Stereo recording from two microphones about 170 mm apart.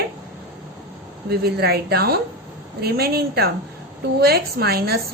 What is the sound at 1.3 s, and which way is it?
Speech, 70° right (ahead or behind).